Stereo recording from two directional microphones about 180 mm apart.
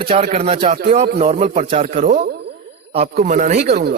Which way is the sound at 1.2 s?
35° right (ahead or behind).